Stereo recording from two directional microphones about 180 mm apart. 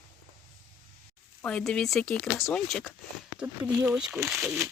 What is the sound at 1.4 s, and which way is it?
Speech, 5° left (ahead or behind).